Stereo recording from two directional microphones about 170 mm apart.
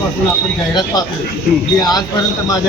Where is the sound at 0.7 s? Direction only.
25° left (ahead or behind).